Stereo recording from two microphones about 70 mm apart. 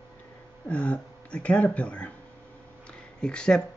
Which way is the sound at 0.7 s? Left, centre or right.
Centre.